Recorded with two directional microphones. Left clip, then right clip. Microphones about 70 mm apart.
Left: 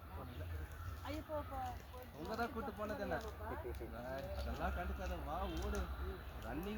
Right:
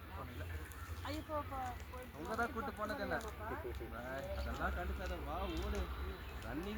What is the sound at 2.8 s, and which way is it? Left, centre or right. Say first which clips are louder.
Speech: right 2 dB; centre.